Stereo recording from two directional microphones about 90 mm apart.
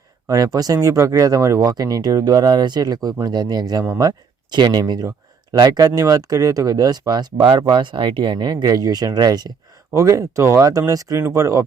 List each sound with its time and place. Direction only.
0.3 s speech: 40° right (ahead or behind)
9.9 s speech: 35° right (ahead or behind)